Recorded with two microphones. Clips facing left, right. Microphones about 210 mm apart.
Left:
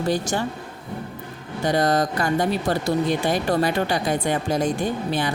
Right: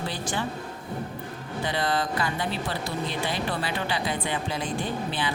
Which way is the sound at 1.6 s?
45° left (ahead or behind).